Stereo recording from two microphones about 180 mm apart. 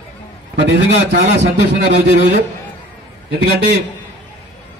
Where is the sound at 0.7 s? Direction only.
80° right.